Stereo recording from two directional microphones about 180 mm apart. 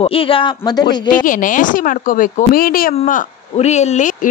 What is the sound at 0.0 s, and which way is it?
Speech, 30° left (ahead or behind).